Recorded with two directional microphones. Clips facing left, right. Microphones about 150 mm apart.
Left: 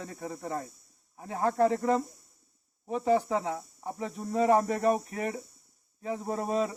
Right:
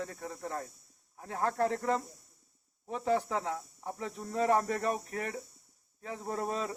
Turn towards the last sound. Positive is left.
turn(degrees=10)  # may be behind; listen again after turning